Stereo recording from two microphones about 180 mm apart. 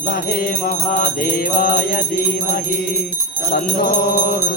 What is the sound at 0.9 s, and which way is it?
Music, 50° left (ahead or behind).